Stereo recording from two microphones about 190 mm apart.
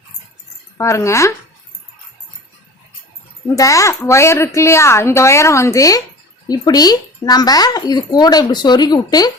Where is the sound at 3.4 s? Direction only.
15° left (ahead or behind).